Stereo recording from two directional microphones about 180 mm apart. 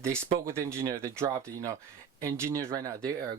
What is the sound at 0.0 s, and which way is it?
Speech, 15° right (ahead or behind).